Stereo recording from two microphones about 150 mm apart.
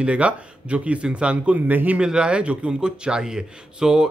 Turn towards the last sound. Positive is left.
turn(degrees=-5)  # may be behind; listen again after turning